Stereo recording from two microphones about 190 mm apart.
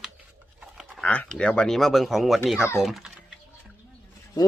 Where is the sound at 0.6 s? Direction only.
5° right (ahead or behind).